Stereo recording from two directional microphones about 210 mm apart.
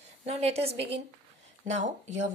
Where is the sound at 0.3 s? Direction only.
30° right (ahead or behind).